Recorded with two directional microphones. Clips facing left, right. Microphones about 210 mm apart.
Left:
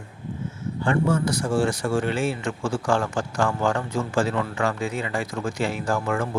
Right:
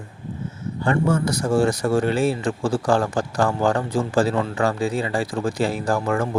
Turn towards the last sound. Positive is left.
turn(degrees=-40)  # may be behind; listen again after turning